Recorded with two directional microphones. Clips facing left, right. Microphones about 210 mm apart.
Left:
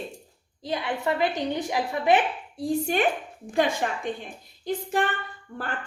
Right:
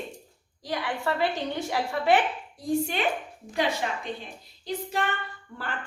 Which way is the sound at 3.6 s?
50° left (ahead or behind).